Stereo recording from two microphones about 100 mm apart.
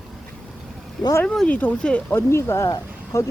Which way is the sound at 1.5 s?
15° left (ahead or behind).